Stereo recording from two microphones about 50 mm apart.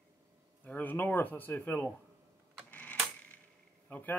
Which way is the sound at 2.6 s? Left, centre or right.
Left.